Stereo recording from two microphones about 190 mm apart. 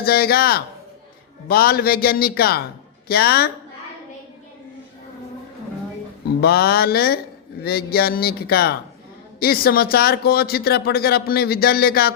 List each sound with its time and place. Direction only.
0.0 s speech: 55° left (ahead or behind)
6.4 s speech: 55° left (ahead or behind)